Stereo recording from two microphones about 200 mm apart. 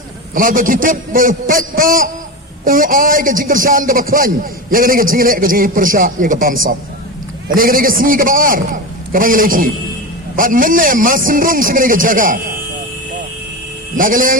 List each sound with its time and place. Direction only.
0.3 s a man's voice: 45° right (ahead or behind)
13.9 s a man's voice: 40° right (ahead or behind)